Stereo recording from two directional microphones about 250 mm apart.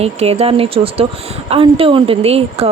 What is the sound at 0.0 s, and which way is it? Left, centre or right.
Speech, right.